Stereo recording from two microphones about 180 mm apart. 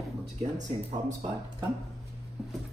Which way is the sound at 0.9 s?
25° right (ahead or behind).